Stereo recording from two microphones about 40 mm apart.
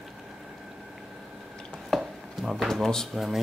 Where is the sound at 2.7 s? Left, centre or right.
Centre.